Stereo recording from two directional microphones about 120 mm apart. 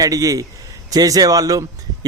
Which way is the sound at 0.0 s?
30° right (ahead or behind).